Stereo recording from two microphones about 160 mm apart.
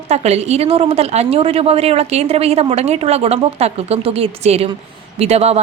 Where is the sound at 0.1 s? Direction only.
40° right (ahead or behind).